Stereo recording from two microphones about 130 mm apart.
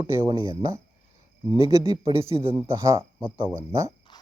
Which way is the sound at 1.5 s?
20° right (ahead or behind).